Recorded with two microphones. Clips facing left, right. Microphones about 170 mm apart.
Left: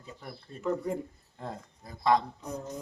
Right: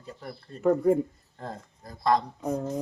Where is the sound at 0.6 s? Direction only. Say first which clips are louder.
Right 9 dB; 55° right (ahead or behind).